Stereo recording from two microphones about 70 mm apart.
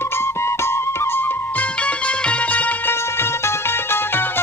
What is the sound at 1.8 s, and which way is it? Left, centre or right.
Music, centre.